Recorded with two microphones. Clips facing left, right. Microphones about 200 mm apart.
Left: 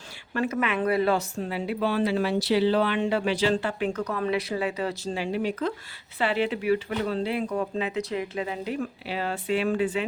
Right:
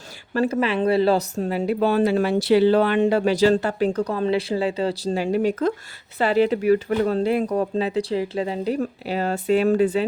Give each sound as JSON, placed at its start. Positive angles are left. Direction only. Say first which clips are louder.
{"t": 0.3, "sound": "speech", "louder": "right 5 dB", "side_deg": -35}